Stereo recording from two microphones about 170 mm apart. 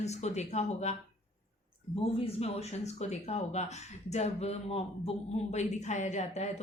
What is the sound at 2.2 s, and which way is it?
Speech, 40° left (ahead or behind).